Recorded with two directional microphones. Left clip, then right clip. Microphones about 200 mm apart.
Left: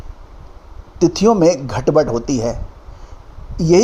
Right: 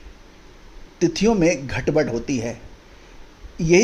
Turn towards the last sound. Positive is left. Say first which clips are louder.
# left 4 dB
turn(degrees=15)  # may be behind; listen again after turning